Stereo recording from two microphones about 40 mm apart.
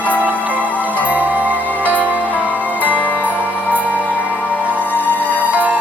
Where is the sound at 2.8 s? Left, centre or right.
Left.